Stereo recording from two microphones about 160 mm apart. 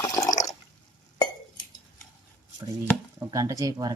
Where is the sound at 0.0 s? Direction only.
20° left (ahead or behind).